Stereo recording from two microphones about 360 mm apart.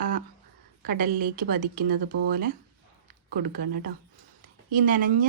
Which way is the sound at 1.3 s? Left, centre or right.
Right.